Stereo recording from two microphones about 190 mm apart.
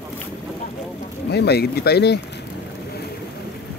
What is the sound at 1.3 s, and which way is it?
Speech, 60° left (ahead or behind).